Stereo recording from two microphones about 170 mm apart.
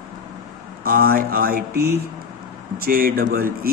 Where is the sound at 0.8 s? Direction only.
60° right (ahead or behind).